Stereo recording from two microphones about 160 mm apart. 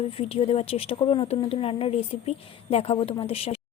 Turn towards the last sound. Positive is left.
turn(degrees=40)  # may be behind; listen again after turning